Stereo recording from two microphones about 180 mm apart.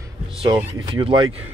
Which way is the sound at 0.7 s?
25° right (ahead or behind).